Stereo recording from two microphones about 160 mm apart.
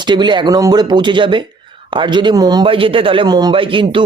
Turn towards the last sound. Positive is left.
turn(degrees=-30)  # may be behind; listen again after turning